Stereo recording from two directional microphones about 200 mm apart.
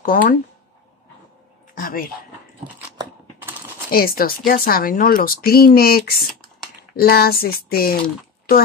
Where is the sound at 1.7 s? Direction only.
45° left (ahead or behind).